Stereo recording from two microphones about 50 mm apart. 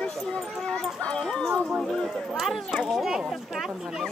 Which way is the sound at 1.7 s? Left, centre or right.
Centre.